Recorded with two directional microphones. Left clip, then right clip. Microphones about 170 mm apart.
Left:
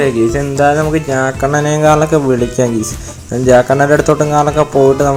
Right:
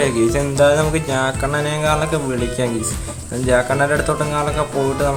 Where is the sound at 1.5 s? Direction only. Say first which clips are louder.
Left 8 dB; 30° left (ahead or behind).